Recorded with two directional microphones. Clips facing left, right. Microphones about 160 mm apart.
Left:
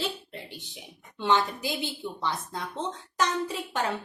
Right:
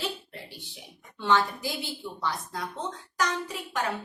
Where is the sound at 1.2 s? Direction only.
20° left (ahead or behind).